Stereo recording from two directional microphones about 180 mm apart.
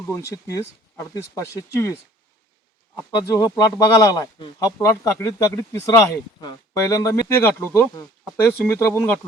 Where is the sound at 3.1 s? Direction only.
20° left (ahead or behind).